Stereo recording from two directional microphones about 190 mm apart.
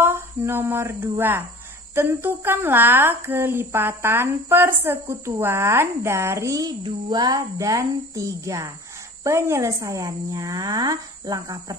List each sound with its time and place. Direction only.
0.0 s a woman's voice: 10° right (ahead or behind)